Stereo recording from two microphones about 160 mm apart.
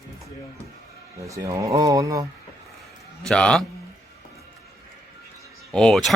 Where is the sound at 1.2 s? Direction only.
20° right (ahead or behind).